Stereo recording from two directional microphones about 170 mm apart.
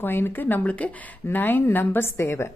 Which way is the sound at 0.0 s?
10° left (ahead or behind).